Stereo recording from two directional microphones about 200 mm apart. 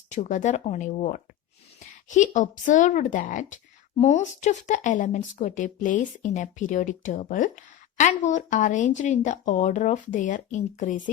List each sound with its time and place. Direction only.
0.1 s speech: 40° left (ahead or behind)